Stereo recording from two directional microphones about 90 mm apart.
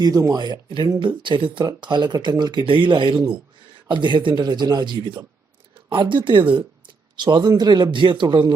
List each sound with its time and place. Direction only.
0.0 s speech: 45° right (ahead or behind)
2.6 s speech: 65° right (ahead or behind)